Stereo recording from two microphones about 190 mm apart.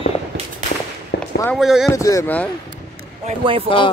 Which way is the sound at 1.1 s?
60° left (ahead or behind).